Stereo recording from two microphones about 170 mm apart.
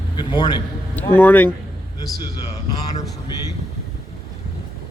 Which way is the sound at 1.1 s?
10° left (ahead or behind).